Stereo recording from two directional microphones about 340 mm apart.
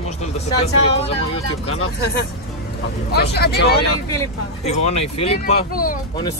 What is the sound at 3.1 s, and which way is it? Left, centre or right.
Speech, left.